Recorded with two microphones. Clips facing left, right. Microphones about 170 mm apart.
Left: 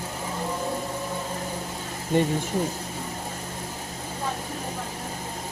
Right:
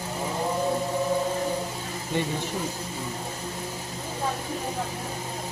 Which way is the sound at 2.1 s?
50° left (ahead or behind).